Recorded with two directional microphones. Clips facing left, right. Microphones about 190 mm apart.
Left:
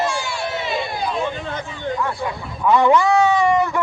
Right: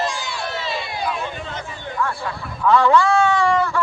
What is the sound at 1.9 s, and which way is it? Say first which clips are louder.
Speech: even; 20° left (ahead or behind).